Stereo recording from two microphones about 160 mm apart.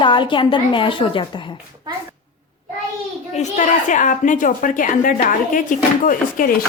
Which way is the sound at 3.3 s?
50° left (ahead or behind).